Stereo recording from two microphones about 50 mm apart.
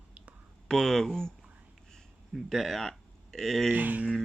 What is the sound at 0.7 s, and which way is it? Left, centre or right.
Speech, centre.